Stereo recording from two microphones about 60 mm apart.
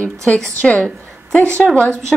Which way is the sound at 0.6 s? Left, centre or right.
Left.